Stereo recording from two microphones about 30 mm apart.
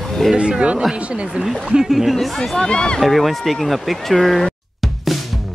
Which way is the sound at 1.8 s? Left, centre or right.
Centre.